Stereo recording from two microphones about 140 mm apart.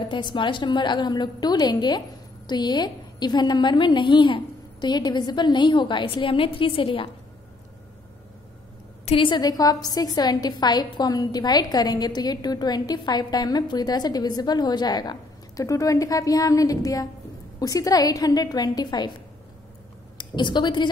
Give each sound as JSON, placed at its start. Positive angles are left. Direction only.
{"t": 0.1, "sound": "a woman's voice", "side_deg": 35}
{"t": 9.0, "sound": "a woman's voice", "side_deg": 40}
{"t": 20.2, "sound": "a woman's voice", "side_deg": 30}